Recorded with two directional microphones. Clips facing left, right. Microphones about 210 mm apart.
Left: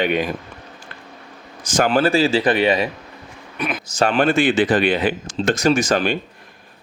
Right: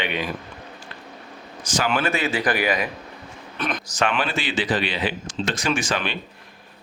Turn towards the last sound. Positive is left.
turn(degrees=45)  # may be behind; listen again after turning